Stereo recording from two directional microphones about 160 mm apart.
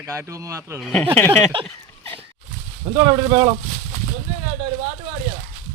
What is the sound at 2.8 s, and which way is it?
Speech, 30° right (ahead or behind).